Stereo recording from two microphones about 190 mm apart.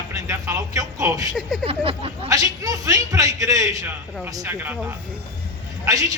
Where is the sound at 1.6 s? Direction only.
30° right (ahead or behind).